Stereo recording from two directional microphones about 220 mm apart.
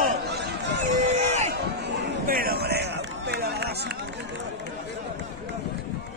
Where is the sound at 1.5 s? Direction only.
50° right (ahead or behind).